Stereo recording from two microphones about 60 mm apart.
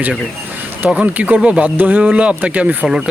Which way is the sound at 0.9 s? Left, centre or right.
Right.